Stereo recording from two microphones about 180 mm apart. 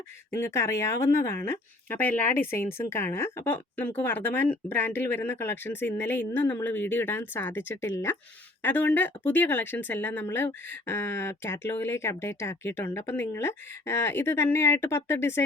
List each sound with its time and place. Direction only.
0.3 s speech: 15° left (ahead or behind)